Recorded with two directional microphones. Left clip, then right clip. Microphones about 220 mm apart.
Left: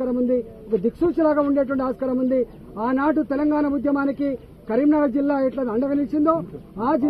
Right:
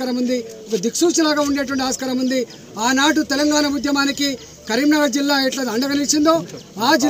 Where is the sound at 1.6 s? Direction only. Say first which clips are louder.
Even; 10° right (ahead or behind).